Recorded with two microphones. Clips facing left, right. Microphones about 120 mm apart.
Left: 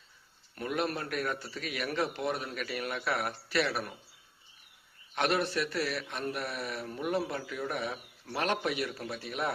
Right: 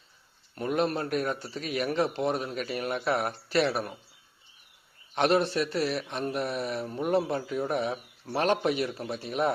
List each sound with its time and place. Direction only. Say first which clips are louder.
0.5 s a man's voice: right 5 dB; 30° right (ahead or behind)
5.1 s a man's voice: right 5 dB; 30° right (ahead or behind)